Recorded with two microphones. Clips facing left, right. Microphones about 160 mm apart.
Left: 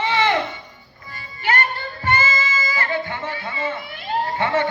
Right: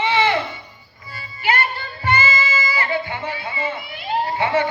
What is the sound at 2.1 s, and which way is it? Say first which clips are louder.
Music: right 1 dB; 45° left (ahead or behind).